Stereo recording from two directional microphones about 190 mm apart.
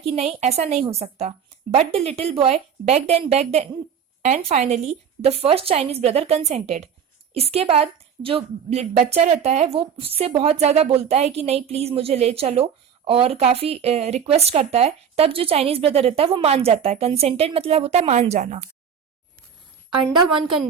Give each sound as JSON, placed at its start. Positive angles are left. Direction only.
{"t": 0.0, "sound": "a woman's voice", "side_deg": -35}